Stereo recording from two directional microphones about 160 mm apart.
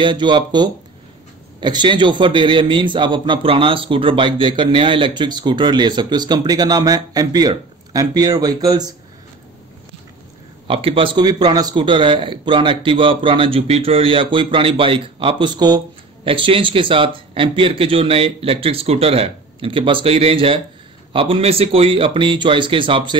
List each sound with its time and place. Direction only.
0.0 s a man's voice: 30° right (ahead or behind)
10.7 s speech: 35° right (ahead or behind)